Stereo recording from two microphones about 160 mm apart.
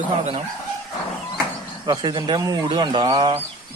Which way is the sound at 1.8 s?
20° right (ahead or behind).